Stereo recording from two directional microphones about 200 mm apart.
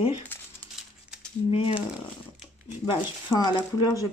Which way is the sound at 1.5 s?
30° left (ahead or behind).